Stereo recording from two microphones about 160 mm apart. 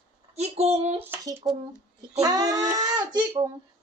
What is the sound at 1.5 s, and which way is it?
A child's voice, 20° right (ahead or behind).